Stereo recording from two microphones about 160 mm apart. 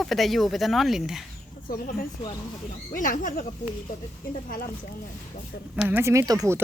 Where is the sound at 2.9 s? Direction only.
60° left (ahead or behind).